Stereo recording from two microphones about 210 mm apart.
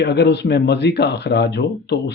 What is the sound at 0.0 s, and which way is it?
Speech, 50° left (ahead or behind).